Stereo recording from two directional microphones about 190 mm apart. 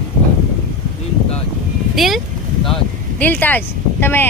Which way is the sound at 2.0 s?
Centre (ahead or behind).